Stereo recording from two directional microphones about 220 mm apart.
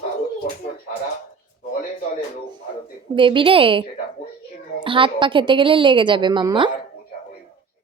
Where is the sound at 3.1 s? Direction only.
20° right (ahead or behind).